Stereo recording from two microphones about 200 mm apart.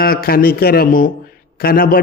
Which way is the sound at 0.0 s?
50° left (ahead or behind).